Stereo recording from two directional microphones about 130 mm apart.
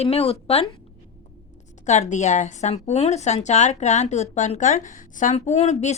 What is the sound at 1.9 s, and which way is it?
A woman's voice, 65° left (ahead or behind).